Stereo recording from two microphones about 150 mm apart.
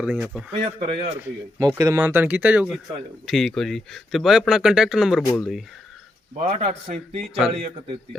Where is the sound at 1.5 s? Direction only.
20° right (ahead or behind).